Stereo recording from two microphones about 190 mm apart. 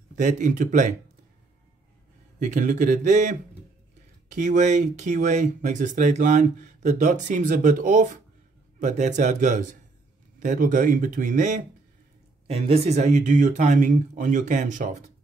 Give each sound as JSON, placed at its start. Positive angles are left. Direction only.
{"t": 0.1, "sound": "speech", "side_deg": -40}
{"t": 2.4, "sound": "speech", "side_deg": -40}